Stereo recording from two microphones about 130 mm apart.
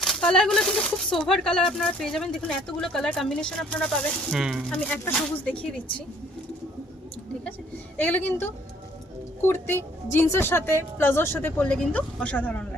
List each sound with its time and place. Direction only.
0.0 s speech: 5° left (ahead or behind)
4.9 s a woman's voice: 10° left (ahead or behind)
7.9 s a woman's voice: 15° left (ahead or behind)
9.5 s a woman's voice: 20° left (ahead or behind)